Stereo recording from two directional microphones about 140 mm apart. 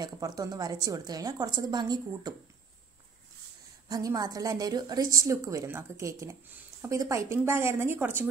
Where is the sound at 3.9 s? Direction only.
25° right (ahead or behind).